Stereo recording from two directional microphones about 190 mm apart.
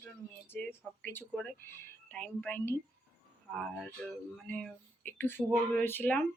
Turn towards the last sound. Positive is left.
turn(degrees=10)  # may be behind; listen again after turning